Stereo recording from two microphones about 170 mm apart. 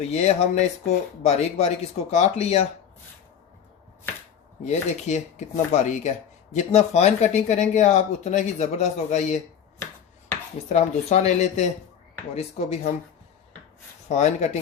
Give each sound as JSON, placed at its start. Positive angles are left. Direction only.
{"t": 0.1, "sound": "speech", "side_deg": 40}
{"t": 4.6, "sound": "speech", "side_deg": 45}
{"t": 9.7, "sound": "finger snapping", "side_deg": 10}
{"t": 10.7, "sound": "speech", "side_deg": 40}
{"t": 14.1, "sound": "speech", "side_deg": 45}